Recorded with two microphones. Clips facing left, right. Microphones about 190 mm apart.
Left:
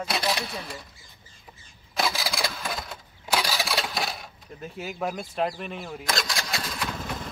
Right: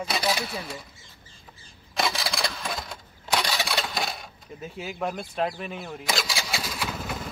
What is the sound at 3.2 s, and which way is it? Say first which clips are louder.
Coin: even; centre (ahead or behind).